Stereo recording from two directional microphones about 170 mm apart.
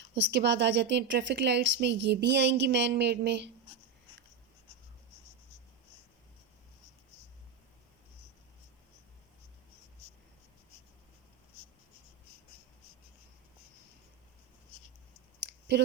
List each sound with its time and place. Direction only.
0.1 s a woman's voice: 90° right
15.4 s clicking: 85° right